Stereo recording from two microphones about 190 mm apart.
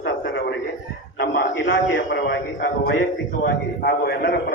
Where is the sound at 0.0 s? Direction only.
65° left (ahead or behind).